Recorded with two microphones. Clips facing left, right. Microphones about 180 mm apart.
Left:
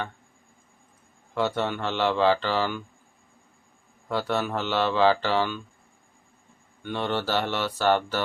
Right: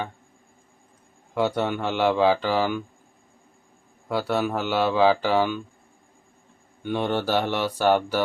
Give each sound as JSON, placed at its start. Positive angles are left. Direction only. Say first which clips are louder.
{"t": 1.3, "sound": "speech", "louder": "right 3 dB", "side_deg": -15}
{"t": 4.1, "sound": "speech", "louder": "right 2 dB", "side_deg": -10}
{"t": 6.8, "sound": "speech", "louder": "right 3 dB", "side_deg": -15}